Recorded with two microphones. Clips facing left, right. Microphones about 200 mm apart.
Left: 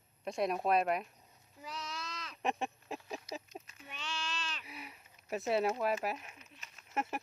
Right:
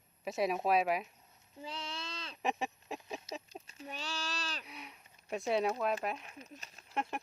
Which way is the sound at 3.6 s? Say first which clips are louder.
Right 4 dB; 35° right (ahead or behind).